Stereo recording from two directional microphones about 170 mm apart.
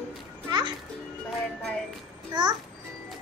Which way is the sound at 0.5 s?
25° right (ahead or behind).